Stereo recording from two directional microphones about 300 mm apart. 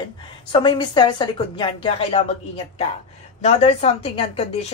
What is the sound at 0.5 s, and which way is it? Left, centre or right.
A woman's voice, centre.